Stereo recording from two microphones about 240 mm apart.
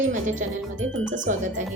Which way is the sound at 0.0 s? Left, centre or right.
Right.